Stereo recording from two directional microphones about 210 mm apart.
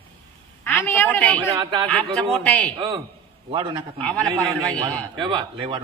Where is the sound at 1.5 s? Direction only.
25° right (ahead or behind).